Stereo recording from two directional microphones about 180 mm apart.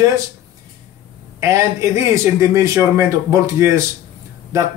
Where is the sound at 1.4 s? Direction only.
15° right (ahead or behind).